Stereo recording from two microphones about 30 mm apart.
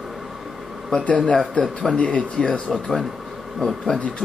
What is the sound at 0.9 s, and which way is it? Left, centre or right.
Speech, left.